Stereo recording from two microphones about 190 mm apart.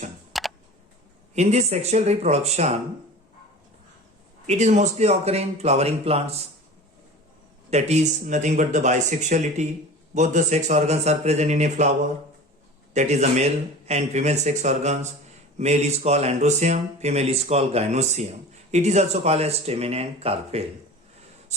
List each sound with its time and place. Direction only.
0.3 s computer keyboard: centre (ahead or behind)
1.4 s speech: 35° right (ahead or behind)
4.4 s speech: 35° right (ahead or behind)
7.7 s speech: 35° right (ahead or behind)
12.9 s speech: 35° right (ahead or behind)